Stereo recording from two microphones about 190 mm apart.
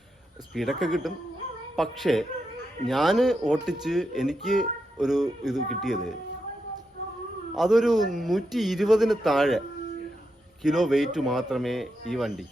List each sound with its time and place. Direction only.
0.5 s speech: centre (ahead or behind)
7.5 s speech: centre (ahead or behind)